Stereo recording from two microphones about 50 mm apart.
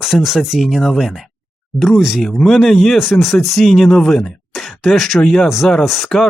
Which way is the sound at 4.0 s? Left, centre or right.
Centre.